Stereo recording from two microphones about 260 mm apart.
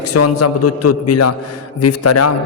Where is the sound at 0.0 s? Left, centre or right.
Left.